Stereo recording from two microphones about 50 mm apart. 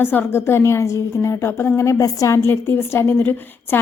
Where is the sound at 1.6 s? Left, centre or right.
Left.